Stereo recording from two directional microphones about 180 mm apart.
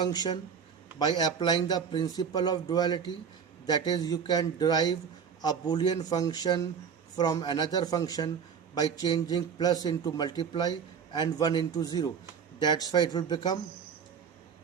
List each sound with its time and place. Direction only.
0.0 s a man's voice: 25° left (ahead or behind)